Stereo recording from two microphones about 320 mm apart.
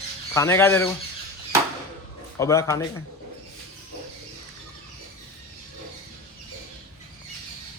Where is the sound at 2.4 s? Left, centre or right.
Centre.